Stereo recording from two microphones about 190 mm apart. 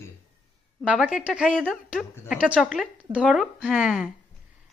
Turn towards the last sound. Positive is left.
turn(degrees=-5)  # may be behind; listen again after turning